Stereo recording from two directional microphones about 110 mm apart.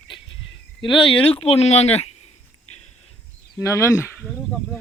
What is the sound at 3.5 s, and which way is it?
Speech, 25° left (ahead or behind).